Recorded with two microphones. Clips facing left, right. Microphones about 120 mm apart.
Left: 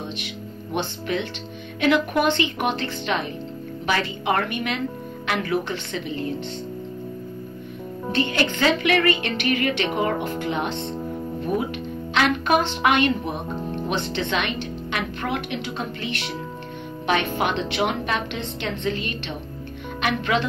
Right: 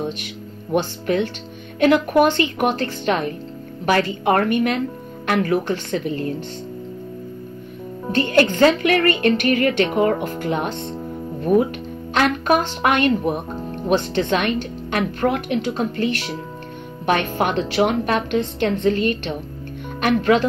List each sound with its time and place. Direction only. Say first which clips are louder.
0.7 s speech: right 6 dB; 45° right (ahead or behind)
8.3 s speech: right 9 dB; 45° right (ahead or behind)
12.1 s speech: right 2 dB; 45° right (ahead or behind)